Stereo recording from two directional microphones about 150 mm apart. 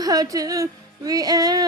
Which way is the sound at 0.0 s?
25° right (ahead or behind).